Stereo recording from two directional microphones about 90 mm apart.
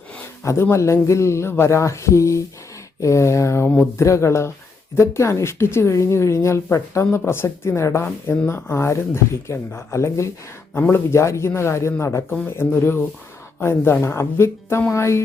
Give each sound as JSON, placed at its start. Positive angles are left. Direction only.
{"t": 0.4, "sound": "a woman's voice", "side_deg": 30}